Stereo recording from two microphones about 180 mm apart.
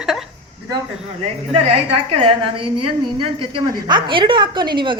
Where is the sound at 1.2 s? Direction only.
35° right (ahead or behind).